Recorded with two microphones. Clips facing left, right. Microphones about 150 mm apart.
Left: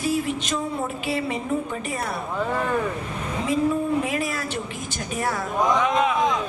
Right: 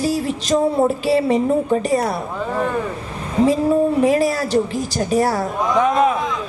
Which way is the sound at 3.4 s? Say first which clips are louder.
Right 7 dB; 35° right (ahead or behind).